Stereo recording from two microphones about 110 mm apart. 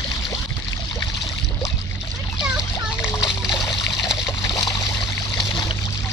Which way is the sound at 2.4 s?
5° right (ahead or behind).